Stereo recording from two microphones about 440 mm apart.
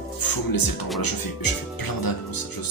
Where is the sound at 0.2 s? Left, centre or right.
Left.